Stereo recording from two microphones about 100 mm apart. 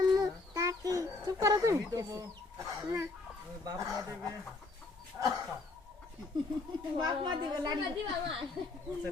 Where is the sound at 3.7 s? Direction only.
30° right (ahead or behind).